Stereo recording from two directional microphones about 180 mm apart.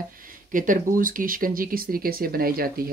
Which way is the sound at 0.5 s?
50° right (ahead or behind).